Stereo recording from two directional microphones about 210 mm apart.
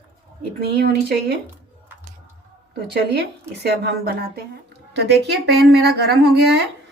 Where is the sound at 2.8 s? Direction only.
50° right (ahead or behind).